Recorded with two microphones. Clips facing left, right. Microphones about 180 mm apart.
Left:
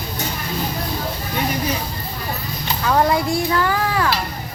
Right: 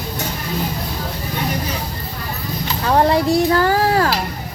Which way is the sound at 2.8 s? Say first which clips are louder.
Right 2 dB; 30° right (ahead or behind).